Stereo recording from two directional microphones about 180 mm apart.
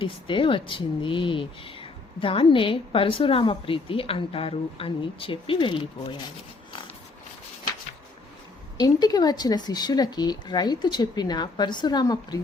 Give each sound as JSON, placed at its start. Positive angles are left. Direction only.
{"t": 0.0, "sound": "speech", "side_deg": 30}
{"t": 8.8, "sound": "speech", "side_deg": 20}